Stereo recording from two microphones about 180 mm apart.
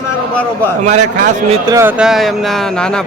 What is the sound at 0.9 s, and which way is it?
Speech, 40° right (ahead or behind).